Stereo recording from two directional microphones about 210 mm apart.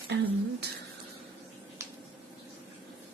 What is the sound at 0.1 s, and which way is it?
Speech, 50° right (ahead or behind).